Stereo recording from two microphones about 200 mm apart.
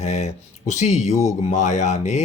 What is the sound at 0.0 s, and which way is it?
Speech, 35° left (ahead or behind).